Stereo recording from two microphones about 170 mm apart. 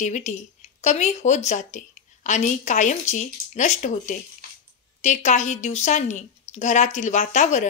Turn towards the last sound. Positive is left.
turn(degrees=45)  # may be behind; listen again after turning